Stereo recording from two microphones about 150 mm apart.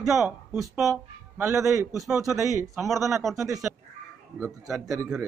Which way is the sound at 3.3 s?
20° right (ahead or behind).